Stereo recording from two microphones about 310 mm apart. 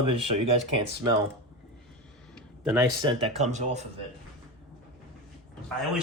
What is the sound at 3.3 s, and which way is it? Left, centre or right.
Speech, right.